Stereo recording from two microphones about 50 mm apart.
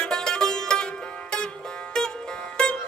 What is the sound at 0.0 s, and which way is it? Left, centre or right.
Music, centre.